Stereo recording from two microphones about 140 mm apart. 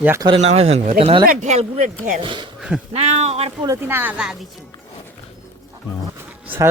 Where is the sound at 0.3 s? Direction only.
45° right (ahead or behind).